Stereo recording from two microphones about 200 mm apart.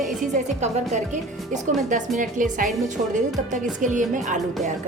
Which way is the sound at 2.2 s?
40° right (ahead or behind).